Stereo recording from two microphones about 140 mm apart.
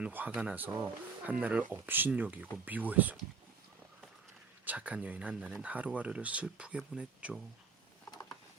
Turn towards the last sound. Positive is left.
turn(degrees=-10)  # may be behind; listen again after turning